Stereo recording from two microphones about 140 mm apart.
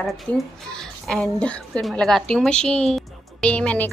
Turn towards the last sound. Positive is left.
turn(degrees=10)  # may be behind; listen again after turning